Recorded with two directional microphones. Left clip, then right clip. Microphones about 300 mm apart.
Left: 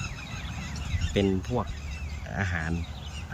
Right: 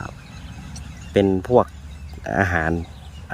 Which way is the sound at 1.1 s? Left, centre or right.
Centre.